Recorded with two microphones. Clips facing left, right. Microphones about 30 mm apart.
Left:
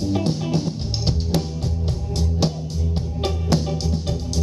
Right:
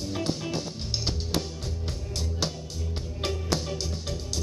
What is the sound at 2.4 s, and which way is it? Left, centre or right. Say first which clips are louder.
Music: left 8 dB; centre.